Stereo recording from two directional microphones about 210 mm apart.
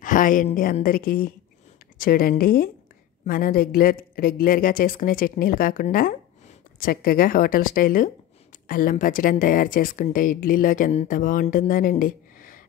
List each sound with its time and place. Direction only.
0.0 s a woman's voice: 40° left (ahead or behind)